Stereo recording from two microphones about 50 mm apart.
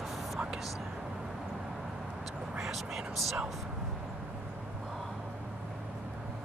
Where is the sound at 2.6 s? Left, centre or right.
Centre.